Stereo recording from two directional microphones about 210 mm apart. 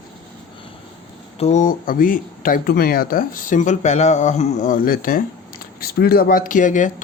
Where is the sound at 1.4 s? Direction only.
35° left (ahead or behind).